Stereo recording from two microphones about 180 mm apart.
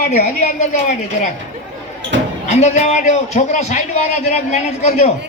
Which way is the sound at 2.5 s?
40° left (ahead or behind).